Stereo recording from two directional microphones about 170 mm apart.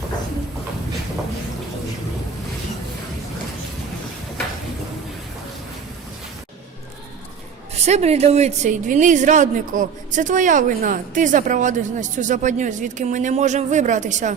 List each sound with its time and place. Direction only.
7.8 s a woman's voice: 40° right (ahead or behind)